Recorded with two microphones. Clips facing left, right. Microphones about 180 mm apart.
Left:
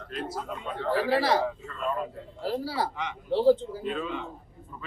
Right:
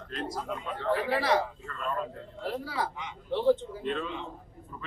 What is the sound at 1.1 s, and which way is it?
Speech, 30° left (ahead or behind).